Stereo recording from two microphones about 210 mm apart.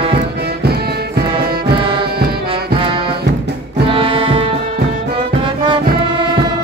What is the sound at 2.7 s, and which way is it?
Music, 25° right (ahead or behind).